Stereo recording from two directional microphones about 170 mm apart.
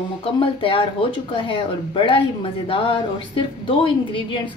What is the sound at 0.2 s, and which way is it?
A woman's voice, 35° left (ahead or behind).